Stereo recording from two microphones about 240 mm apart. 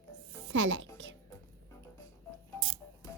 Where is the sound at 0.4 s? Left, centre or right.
Right.